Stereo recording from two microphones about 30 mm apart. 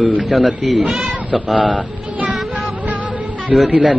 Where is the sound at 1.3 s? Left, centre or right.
Right.